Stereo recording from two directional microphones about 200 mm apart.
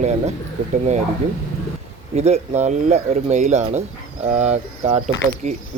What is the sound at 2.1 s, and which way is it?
Speech, 30° right (ahead or behind).